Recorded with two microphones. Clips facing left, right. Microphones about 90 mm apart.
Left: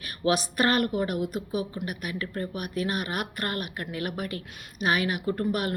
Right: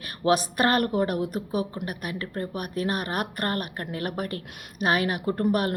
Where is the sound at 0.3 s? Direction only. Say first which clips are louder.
Right 2 dB; 40° right (ahead or behind).